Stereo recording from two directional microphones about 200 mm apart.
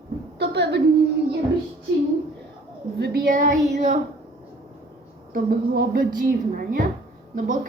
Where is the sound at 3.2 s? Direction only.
40° right (ahead or behind).